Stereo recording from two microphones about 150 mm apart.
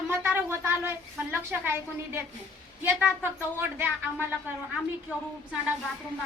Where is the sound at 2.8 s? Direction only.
15° right (ahead or behind).